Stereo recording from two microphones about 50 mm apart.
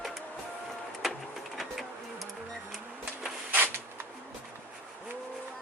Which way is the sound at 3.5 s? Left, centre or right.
Right.